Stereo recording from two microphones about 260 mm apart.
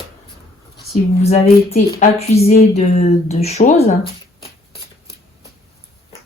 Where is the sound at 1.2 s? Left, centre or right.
Left.